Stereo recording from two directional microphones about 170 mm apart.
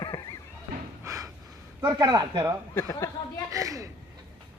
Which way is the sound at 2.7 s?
15° left (ahead or behind).